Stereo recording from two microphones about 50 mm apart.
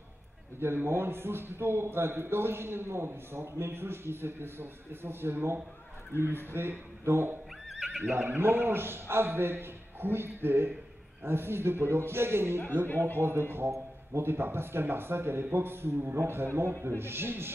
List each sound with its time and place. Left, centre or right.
0.6 s a man's voice: right
7.7 s neigh: centre
8.0 s a man's voice: right